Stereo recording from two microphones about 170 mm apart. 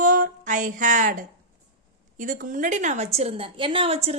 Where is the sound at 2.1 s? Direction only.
50° right (ahead or behind).